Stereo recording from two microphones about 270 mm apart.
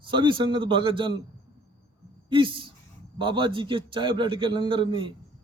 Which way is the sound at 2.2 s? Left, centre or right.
Centre.